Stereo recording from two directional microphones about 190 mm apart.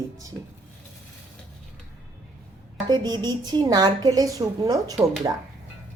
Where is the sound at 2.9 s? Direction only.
20° right (ahead or behind).